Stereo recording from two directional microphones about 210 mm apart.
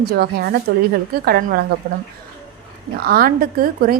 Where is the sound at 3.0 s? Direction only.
45° right (ahead or behind).